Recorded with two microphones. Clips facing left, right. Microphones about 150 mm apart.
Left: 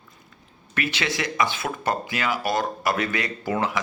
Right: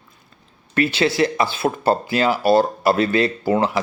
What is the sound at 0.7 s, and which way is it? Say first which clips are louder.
A man's voice: right 9 dB; 30° right (ahead or behind).